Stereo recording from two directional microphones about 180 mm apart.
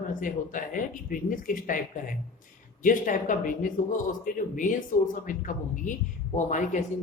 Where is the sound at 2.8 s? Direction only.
45° left (ahead or behind).